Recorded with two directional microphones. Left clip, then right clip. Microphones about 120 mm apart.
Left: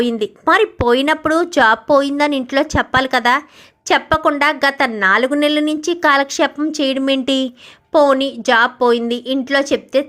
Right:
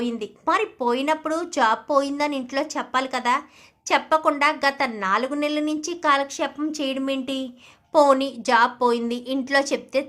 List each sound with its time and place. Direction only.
0.0 s speech: 45° left (ahead or behind)
6.6 s speech: 40° left (ahead or behind); by 7.5 s 65° left (ahead or behind)
7.9 s a woman's voice: 35° left (ahead or behind)